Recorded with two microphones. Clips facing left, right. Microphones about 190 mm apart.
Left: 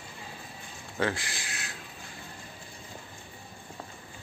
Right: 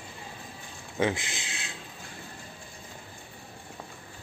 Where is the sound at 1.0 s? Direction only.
20° right (ahead or behind).